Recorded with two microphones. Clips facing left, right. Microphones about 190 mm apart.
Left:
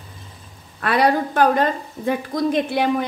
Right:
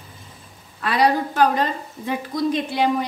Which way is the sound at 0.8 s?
55° left (ahead or behind).